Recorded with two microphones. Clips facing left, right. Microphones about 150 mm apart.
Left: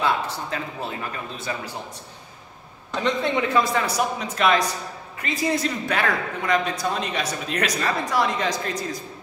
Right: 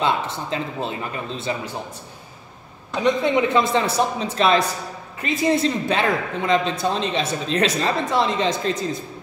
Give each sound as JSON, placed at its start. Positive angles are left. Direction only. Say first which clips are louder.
{"t": 0.0, "sound": "a man's voice", "louder": "right 2 dB", "side_deg": -20}
{"t": 3.0, "sound": "a man's voice", "louder": "right 4 dB", "side_deg": -20}